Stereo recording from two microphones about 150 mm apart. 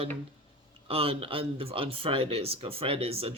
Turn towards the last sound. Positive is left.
turn(degrees=-40)  # may be behind; listen again after turning